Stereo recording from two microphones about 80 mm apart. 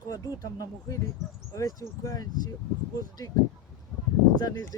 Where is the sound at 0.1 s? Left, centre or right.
Left.